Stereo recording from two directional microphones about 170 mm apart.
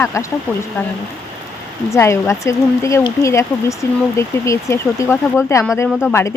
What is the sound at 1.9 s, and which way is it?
Speech, 15° left (ahead or behind).